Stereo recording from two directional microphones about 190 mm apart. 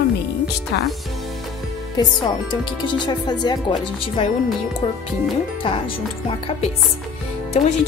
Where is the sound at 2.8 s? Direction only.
25° left (ahead or behind).